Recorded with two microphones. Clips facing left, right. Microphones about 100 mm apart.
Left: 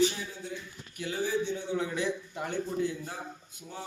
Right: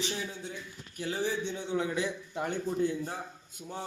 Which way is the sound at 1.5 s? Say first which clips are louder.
Even; 20° right (ahead or behind).